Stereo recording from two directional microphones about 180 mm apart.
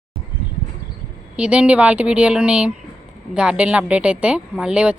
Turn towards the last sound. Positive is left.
turn(degrees=-5)  # may be behind; listen again after turning